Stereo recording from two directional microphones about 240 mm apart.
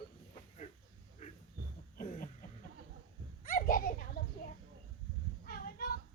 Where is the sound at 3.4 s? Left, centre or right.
Left.